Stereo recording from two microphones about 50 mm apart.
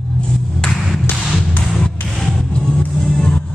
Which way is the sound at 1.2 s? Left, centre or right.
Centre.